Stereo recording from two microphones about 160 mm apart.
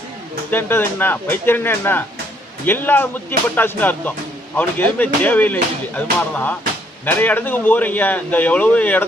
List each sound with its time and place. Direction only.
0.5 s a man's voice: 10° left (ahead or behind)